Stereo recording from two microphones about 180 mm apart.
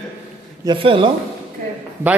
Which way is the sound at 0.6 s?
30° right (ahead or behind).